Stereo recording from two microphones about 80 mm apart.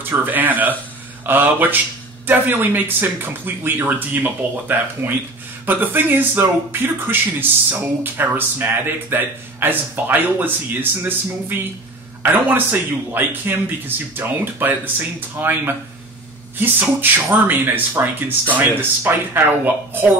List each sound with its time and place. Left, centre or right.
0.1 s a man's voice: right